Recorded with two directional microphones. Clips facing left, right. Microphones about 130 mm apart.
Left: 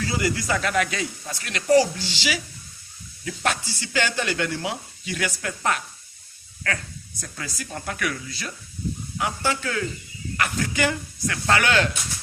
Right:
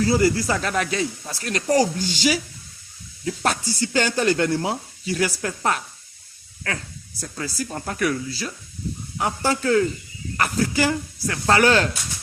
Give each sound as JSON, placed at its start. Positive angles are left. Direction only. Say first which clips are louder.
{"t": 0.0, "sound": "speech", "louder": "right 7 dB", "side_deg": -35}
{"t": 3.7, "sound": "speech", "louder": "right 4 dB", "side_deg": -40}
{"t": 7.2, "sound": "speech", "louder": "right 6 dB", "side_deg": -30}